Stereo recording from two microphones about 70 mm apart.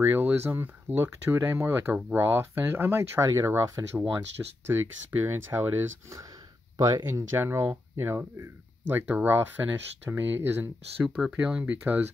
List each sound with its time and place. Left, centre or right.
0.0 s speech: right
4.4 s speech: right
5.2 s speech: right
6.8 s speech: right
11.3 s speech: centre
11.7 s speech: right